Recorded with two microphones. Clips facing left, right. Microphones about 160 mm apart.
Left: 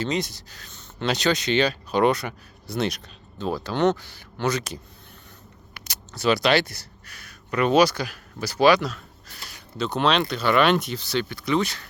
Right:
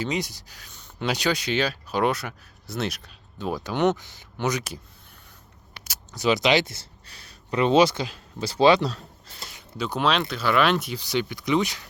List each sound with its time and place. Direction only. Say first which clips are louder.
0.0 s speech: left 2 dB; 10° right (ahead or behind)
5.8 s speech: left 1 dB; 10° right (ahead or behind)
9.8 s speech: left 2 dB; 5° right (ahead or behind)